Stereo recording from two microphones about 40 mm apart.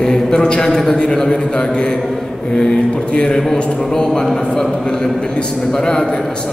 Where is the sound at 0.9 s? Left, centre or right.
Centre.